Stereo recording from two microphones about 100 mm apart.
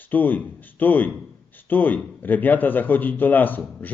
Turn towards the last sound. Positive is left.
turn(degrees=20)  # may be behind; listen again after turning